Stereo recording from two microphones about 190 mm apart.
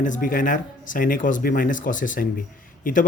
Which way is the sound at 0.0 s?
45° left (ahead or behind).